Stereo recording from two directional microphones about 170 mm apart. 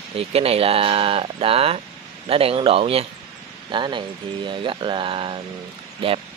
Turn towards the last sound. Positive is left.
turn(degrees=-30)  # may be behind; listen again after turning